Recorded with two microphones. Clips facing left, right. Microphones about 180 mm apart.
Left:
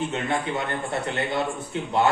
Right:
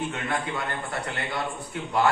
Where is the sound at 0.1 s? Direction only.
25° left (ahead or behind).